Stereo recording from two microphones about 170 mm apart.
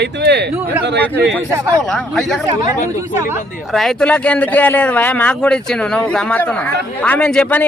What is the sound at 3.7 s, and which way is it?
A man's voice, centre (ahead or behind).